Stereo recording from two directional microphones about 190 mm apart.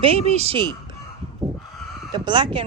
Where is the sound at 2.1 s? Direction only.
25° right (ahead or behind).